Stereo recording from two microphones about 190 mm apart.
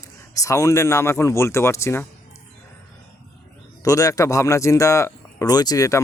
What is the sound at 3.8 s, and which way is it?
Speech, 15° left (ahead or behind).